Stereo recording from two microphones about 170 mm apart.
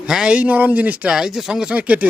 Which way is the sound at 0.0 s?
5° right (ahead or behind).